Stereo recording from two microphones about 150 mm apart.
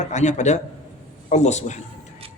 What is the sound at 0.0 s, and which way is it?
A man's voice, 50° left (ahead or behind).